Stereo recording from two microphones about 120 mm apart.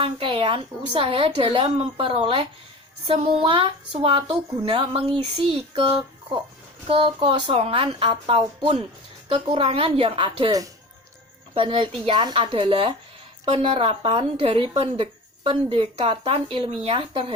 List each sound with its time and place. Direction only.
0.0 s a woman's voice: 50° right (ahead or behind)
11.5 s a woman's voice: 45° right (ahead or behind)